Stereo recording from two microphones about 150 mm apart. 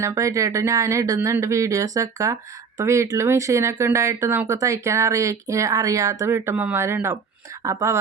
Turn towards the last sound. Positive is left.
turn(degrees=-20)  # may be behind; listen again after turning